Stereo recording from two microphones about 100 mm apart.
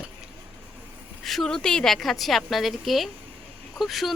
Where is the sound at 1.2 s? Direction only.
Centre (ahead or behind).